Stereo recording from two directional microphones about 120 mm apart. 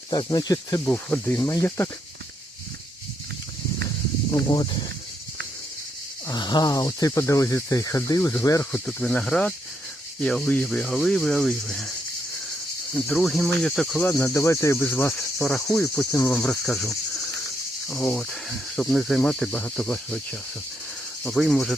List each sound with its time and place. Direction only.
0.1 s speech: 35° left (ahead or behind)
0.9 s insect: 15° left (ahead or behind)
1.5 s speech: 25° left (ahead or behind)
4.3 s speech: 30° left (ahead or behind)
6.2 s speech: 35° left (ahead or behind)
8.9 s insect: 15° left (ahead or behind)
10.2 s speech: 5° left (ahead or behind)
13.1 s speech: centre (ahead or behind)
14.0 s speech: 15° left (ahead or behind)
14.8 s insect: 15° left (ahead or behind)
15.2 s speech: 5° left (ahead or behind)
15.8 s insect: 25° left (ahead or behind); by 16.9 s 5° left (ahead or behind)
17.8 s speech: 5° left (ahead or behind)
21.2 s speech: centre (ahead or behind)